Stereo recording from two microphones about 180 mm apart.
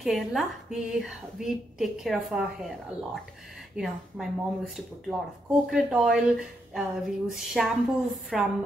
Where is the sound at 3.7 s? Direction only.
Centre (ahead or behind).